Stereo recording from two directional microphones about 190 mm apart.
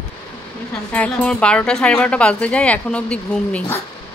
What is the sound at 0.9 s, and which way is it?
Speech, 5° left (ahead or behind).